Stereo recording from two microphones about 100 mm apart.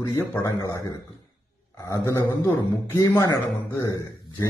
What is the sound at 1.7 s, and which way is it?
A man's voice, 30° left (ahead or behind).